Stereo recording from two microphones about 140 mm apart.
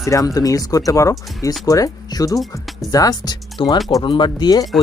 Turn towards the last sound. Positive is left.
turn(degrees=30)  # may be behind; listen again after turning